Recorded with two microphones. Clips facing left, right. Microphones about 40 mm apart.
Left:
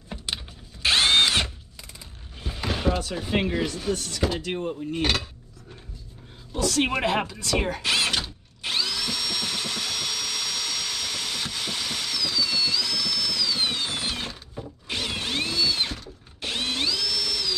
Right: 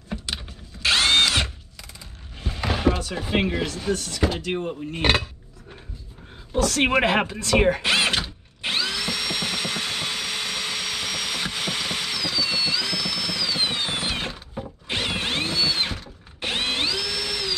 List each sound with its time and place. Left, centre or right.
0.1 s a sound: centre
0.8 s drill: right
2.4 s a sound: centre
3.1 s speech: centre
4.5 s speech: right
6.5 s speech: right
8.6 s drill: right